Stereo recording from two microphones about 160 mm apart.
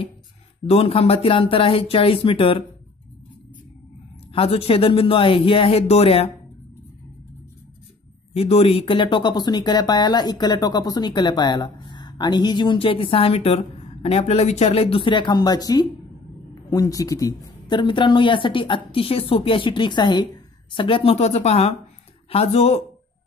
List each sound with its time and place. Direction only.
0.7 s speech: 35° left (ahead or behind)
4.3 s speech: 35° left (ahead or behind)
8.3 s speech: 40° left (ahead or behind)